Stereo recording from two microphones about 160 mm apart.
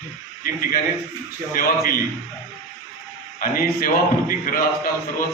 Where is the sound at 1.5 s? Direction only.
65° left (ahead or behind).